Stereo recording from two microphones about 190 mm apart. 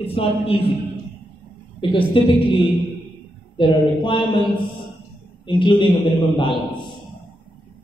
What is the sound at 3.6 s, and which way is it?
A man's voice, 25° left (ahead or behind).